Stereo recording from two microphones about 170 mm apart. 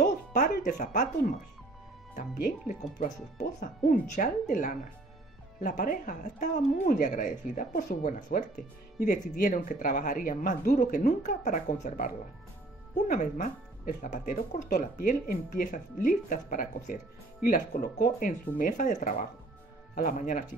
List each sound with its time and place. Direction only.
0.0 s music: 50° left (ahead or behind)
0.7 s speech: 50° left (ahead or behind)
3.0 s speech: 45° left (ahead or behind)
13.1 s speech: 50° left (ahead or behind)